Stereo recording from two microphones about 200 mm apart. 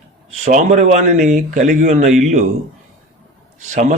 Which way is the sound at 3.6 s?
35° right (ahead or behind).